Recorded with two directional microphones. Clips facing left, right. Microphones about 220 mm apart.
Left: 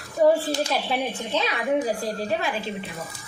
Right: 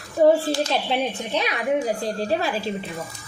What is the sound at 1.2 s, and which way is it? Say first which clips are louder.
Speech: right 1 dB; 15° right (ahead or behind).